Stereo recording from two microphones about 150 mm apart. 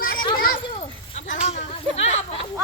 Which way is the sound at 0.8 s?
50° left (ahead or behind).